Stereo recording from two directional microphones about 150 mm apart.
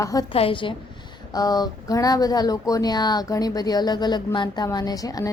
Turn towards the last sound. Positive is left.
turn(degrees=25)  # may be behind; listen again after turning